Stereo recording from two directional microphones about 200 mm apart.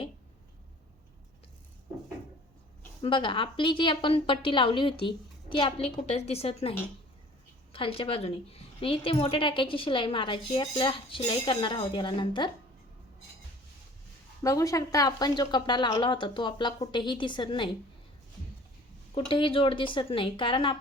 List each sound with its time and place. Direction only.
3.0 s a woman's voice: 25° left (ahead or behind)
14.4 s a woman's voice: 15° left (ahead or behind)
19.3 s a woman's voice: 25° left (ahead or behind)